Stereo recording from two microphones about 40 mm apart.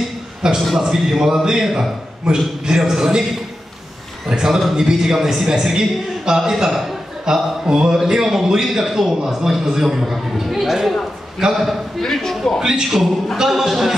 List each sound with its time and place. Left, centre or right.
0.4 s a man's voice: centre
4.3 s a man's voice: centre
12.0 s a man's voice: centre
12.5 s a man's voice: centre